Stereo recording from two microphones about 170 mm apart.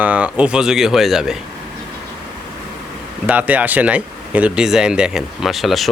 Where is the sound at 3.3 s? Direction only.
10° right (ahead or behind).